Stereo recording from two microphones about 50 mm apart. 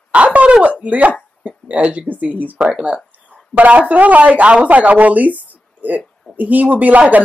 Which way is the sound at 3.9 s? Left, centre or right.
Right.